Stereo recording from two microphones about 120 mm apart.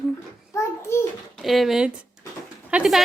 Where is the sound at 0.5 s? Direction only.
25° left (ahead or behind).